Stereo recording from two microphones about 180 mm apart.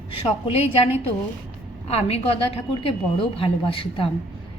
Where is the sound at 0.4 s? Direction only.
35° left (ahead or behind).